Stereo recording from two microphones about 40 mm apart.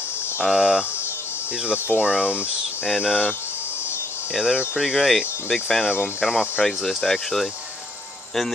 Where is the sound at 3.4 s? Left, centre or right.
Left.